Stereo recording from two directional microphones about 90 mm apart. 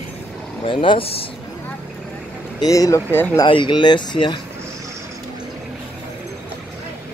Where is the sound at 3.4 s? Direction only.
60° left (ahead or behind).